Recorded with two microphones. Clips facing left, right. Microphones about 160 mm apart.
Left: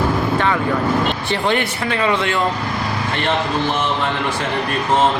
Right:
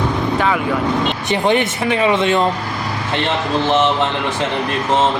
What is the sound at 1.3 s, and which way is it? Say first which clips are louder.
Speech: right 3 dB; 20° right (ahead or behind).